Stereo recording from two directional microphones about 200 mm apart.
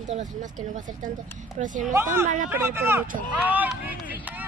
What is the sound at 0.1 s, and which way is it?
Speech, 40° right (ahead or behind).